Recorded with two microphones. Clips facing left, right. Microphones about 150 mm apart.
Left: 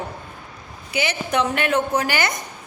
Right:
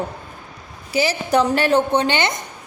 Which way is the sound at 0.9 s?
35° right (ahead or behind).